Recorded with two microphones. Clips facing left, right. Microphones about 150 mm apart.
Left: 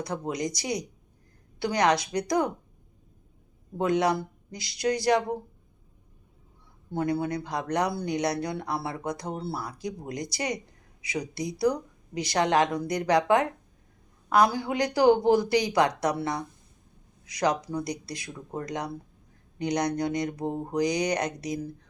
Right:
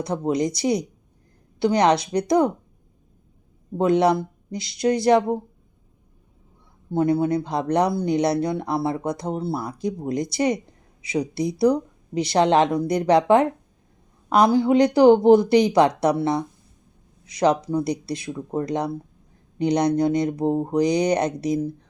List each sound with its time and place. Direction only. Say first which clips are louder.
0.0 s speech: right 8 dB; 25° right (ahead or behind)
3.8 s speech: right 6 dB; 25° right (ahead or behind)
6.9 s speech: right 8 dB; 20° right (ahead or behind)